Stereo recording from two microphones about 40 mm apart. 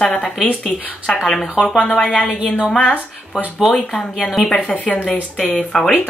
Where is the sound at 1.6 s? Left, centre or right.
Left.